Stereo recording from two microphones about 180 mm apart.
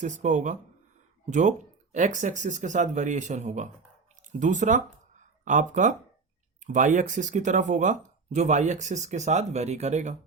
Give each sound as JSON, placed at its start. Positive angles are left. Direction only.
{"t": 0.0, "sound": "speech", "side_deg": -45}